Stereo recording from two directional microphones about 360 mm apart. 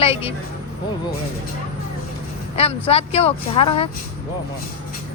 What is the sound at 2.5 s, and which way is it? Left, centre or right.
Speech, centre.